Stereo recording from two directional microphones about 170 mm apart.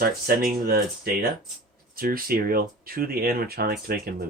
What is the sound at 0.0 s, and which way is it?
Speech, 60° right (ahead or behind).